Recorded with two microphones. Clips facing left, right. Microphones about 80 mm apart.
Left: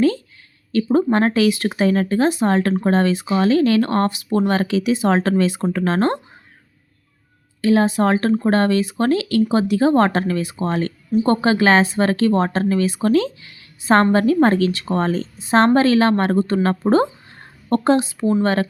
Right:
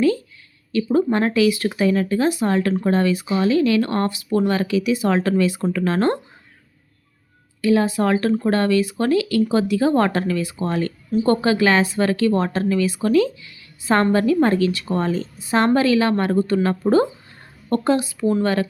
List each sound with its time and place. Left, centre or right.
0.9 s speech: left
1.5 s speech: left
1.9 s speech: left
7.6 s speech: left